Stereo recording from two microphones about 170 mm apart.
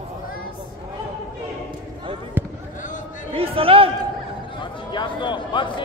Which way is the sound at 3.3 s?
35° right (ahead or behind).